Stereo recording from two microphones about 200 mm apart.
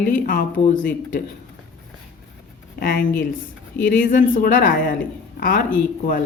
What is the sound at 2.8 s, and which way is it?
A woman's voice, 45° left (ahead or behind).